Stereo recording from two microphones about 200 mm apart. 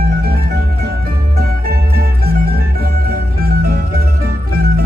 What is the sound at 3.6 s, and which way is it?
Music, 50° right (ahead or behind).